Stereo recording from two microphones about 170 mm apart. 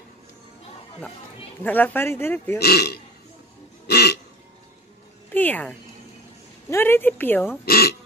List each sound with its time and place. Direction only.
1.6 s speech: 10° left (ahead or behind)
2.6 s a man's voice: 70° left (ahead or behind)
3.8 s music: 75° left (ahead or behind)
5.3 s speech: 10° left (ahead or behind)
7.6 s speech: 65° left (ahead or behind)